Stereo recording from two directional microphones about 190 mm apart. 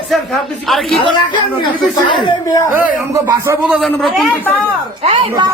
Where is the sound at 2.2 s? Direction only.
20° left (ahead or behind).